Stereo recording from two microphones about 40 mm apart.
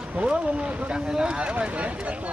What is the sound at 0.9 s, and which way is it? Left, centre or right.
Speech, centre.